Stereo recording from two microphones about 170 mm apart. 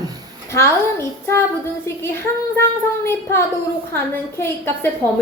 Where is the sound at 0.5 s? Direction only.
15° left (ahead or behind).